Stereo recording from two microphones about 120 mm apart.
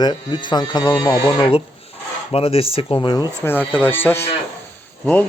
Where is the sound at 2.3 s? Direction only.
50° left (ahead or behind).